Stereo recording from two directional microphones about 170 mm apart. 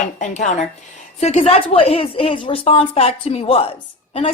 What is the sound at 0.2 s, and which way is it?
A woman's voice, 45° left (ahead or behind).